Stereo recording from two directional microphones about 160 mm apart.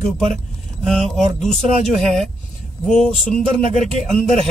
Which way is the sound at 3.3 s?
50° left (ahead or behind).